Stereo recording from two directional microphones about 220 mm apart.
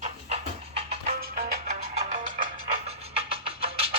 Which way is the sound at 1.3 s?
40° right (ahead or behind).